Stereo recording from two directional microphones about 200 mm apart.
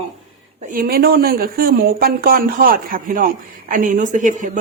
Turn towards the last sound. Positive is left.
turn(degrees=-40)  # may be behind; listen again after turning